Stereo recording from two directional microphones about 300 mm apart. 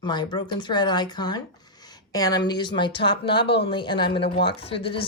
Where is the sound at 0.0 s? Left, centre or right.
Centre.